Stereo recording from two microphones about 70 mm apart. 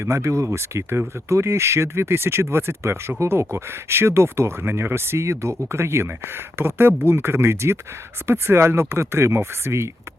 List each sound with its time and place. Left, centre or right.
0.0 s speech: right